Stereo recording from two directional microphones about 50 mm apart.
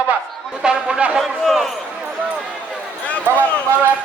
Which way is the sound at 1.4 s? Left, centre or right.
Centre.